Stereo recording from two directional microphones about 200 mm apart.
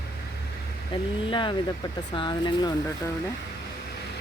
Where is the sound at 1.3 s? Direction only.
25° left (ahead or behind).